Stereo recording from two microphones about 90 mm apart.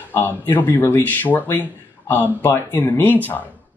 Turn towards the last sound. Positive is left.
turn(degrees=20)  # may be behind; listen again after turning